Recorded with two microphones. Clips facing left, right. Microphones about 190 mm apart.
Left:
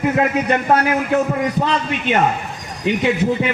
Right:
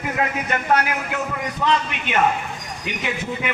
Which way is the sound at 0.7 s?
35° left (ahead or behind).